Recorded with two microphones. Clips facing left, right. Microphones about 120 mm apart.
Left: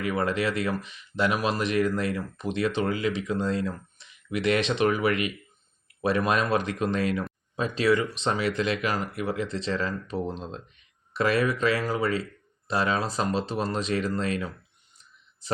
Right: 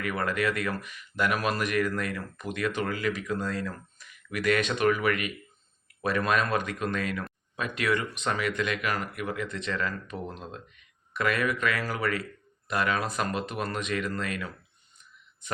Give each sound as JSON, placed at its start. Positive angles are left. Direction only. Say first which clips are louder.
{"t": 0.0, "sound": "a man's voice", "louder": "left 2 dB", "side_deg": 25}